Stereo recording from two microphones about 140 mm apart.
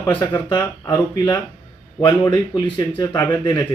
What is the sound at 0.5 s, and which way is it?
Speech, 30° left (ahead or behind).